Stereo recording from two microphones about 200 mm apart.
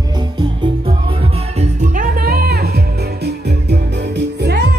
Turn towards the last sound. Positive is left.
turn(degrees=-55)  # may be behind; listen again after turning